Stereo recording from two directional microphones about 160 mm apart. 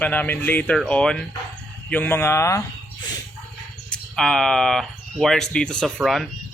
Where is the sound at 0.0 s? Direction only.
10° left (ahead or behind).